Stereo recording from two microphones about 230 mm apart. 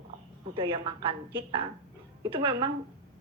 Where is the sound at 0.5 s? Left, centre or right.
Right.